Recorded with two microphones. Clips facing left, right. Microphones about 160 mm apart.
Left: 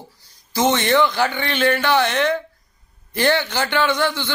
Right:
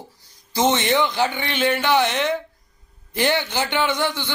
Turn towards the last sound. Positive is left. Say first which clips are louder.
# left 2 dB
turn(degrees=-15)  # may be behind; listen again after turning